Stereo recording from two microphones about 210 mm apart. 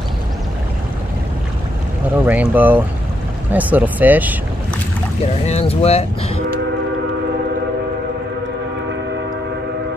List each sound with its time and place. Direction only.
2.2 s speech: 5° right (ahead or behind)
5.2 s speech: 30° left (ahead or behind)